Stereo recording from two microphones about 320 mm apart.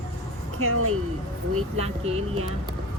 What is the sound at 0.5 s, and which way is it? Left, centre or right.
Speech, right.